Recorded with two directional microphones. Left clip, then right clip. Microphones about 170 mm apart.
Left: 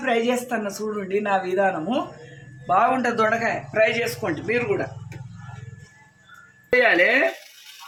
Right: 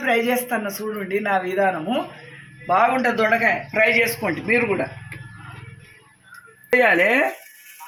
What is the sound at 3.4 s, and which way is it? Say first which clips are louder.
Speech: right 2 dB; 25° right (ahead or behind).